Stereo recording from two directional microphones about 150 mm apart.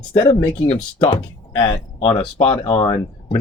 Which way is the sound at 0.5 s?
35° left (ahead or behind).